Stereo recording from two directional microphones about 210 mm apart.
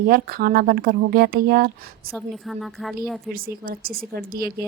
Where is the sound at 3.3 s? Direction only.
45° right (ahead or behind).